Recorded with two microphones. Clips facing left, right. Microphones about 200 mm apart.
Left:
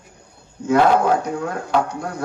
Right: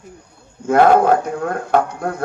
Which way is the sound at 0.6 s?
55° right (ahead or behind).